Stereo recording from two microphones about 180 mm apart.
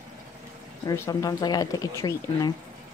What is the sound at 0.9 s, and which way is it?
Speech, 20° left (ahead or behind).